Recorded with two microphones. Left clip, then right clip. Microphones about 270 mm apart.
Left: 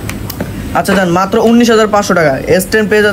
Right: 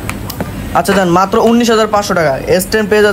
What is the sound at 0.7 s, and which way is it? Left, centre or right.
Speech, centre.